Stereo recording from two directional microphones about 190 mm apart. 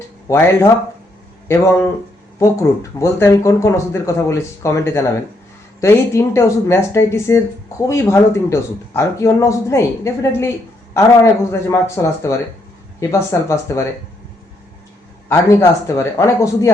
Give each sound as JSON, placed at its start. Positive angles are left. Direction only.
{"t": 0.3, "sound": "speech", "side_deg": 15}
{"t": 11.5, "sound": "speech", "side_deg": 15}
{"t": 15.3, "sound": "speech", "side_deg": 15}